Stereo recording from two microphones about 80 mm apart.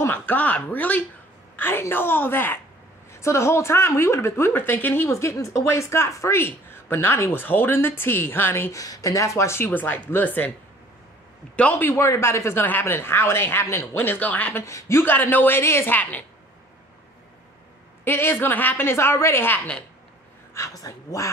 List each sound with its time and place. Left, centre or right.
0.0 s speech: left
3.1 s a woman's voice: left
4.5 s speech: left
8.7 s speech: left
9.7 s speech: left
11.5 s a man's voice: centre
11.9 s speech: left
14.6 s a woman's voice: left
16.0 s speech: centre
18.0 s speech: left
20.5 s speech: left